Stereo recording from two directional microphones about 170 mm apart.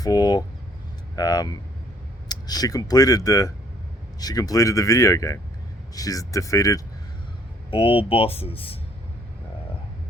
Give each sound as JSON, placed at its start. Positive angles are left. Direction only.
{"t": 0.0, "sound": "speech", "side_deg": 25}
{"t": 7.7, "sound": "speech", "side_deg": 35}